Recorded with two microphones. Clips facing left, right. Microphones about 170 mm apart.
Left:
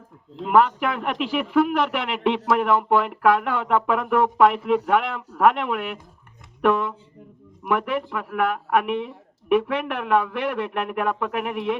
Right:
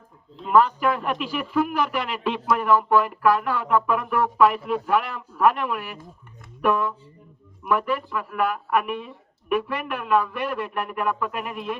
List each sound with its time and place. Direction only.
0.3 s speech: 70° left (ahead or behind)
7.8 s speech: 70° left (ahead or behind)